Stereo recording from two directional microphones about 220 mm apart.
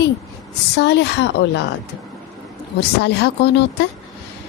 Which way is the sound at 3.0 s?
50° left (ahead or behind).